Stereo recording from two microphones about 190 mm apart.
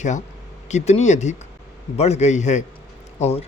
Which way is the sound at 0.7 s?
35° left (ahead or behind).